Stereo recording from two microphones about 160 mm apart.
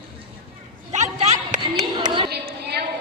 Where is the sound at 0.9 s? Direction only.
45° right (ahead or behind).